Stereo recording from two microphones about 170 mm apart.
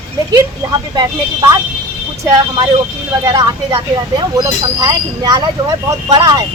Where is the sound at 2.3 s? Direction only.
25° right (ahead or behind).